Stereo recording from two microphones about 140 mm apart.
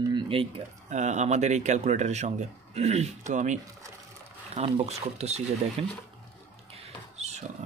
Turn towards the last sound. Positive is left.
turn(degrees=-50)  # may be behind; listen again after turning